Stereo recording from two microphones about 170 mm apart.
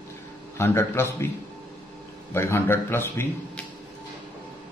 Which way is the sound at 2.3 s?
15° left (ahead or behind).